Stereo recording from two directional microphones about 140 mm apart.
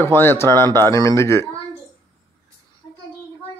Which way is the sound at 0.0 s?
15° left (ahead or behind).